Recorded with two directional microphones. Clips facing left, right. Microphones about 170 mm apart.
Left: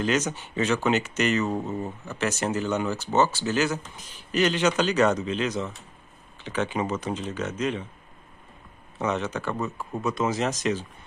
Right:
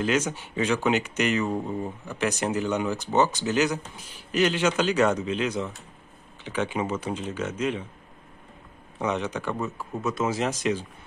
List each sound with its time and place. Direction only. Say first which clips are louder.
0.0 s speech: even; 10° right (ahead or behind)
8.9 s speech: even; 15° right (ahead or behind)